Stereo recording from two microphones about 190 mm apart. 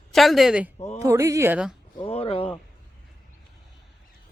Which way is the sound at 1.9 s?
30° left (ahead or behind).